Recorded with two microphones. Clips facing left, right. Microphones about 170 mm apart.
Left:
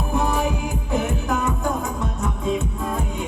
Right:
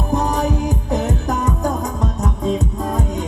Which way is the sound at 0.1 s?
40° right (ahead or behind).